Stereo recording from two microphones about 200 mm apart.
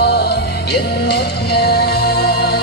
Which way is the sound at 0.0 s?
55° left (ahead or behind).